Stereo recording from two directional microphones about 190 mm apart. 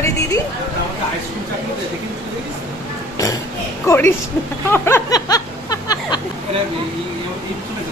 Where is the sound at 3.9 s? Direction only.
10° left (ahead or behind).